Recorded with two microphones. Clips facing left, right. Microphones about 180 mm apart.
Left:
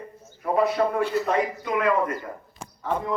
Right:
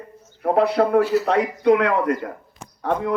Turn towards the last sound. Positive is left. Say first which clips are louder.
# right 5 dB
turn(degrees=-65)  # may be behind; listen again after turning